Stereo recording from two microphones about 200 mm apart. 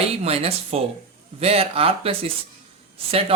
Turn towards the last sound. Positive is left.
turn(degrees=-30)  # may be behind; listen again after turning